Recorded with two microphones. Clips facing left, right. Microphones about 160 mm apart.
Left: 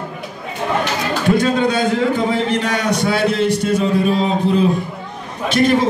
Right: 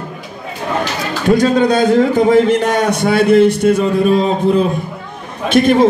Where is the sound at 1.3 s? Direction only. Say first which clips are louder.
Right 5 dB; 40° right (ahead or behind).